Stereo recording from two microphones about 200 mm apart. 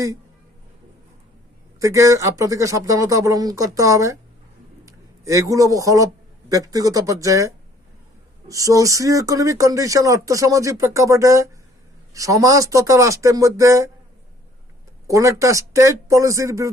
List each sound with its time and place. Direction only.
1.8 s speech: 15° right (ahead or behind)
15.0 s speech: 15° right (ahead or behind)